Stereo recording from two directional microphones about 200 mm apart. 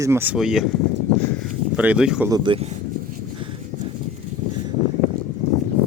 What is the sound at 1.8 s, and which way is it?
Speech, 5° right (ahead or behind).